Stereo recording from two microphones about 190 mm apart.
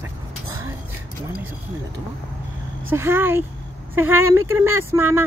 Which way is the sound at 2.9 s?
10° right (ahead or behind).